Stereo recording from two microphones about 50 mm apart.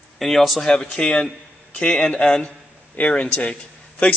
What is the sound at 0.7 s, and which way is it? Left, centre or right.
A man's voice, centre.